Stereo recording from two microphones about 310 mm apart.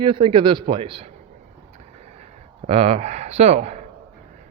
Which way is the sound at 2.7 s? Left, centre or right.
Centre.